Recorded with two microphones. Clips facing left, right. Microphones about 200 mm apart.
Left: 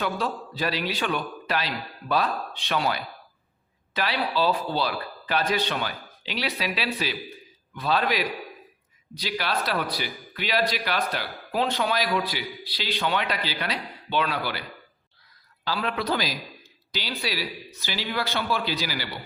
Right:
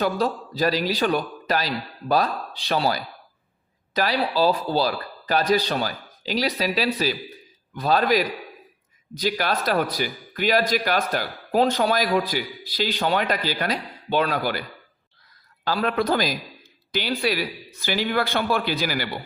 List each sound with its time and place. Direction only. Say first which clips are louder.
0.0 s a man's voice: right 5 dB; 40° right (ahead or behind)
15.6 s a man's voice: right 5 dB; 45° right (ahead or behind)